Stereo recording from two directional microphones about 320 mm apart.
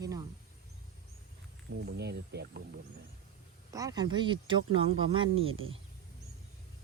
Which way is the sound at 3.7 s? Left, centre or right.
Centre.